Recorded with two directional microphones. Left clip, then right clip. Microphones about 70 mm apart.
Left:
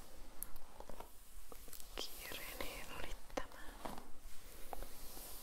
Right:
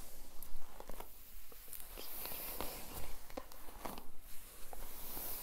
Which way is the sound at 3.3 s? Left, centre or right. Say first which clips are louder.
Left 4 dB; right.